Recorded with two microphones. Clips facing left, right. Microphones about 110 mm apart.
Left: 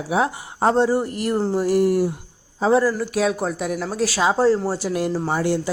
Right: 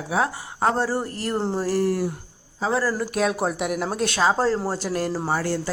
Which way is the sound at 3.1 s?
Centre (ahead or behind).